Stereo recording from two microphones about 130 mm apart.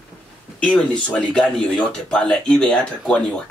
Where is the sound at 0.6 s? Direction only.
10° left (ahead or behind).